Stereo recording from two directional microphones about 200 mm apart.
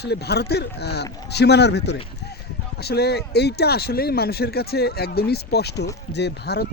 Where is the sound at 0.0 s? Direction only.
55° left (ahead or behind).